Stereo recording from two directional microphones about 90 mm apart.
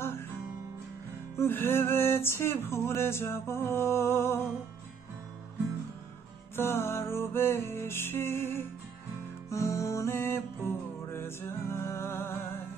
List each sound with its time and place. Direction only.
1.4 s music: 25° left (ahead or behind)
6.5 s music: 25° left (ahead or behind)